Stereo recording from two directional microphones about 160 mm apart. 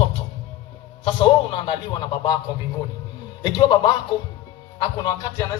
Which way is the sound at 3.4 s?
25° left (ahead or behind).